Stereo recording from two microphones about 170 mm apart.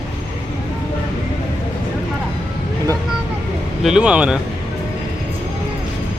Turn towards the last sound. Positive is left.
turn(degrees=-5)  # may be behind; listen again after turning